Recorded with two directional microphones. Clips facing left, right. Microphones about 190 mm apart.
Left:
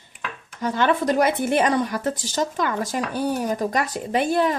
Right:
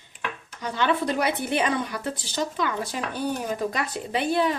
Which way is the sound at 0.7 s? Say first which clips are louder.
Left 4 dB; 45° left (ahead or behind).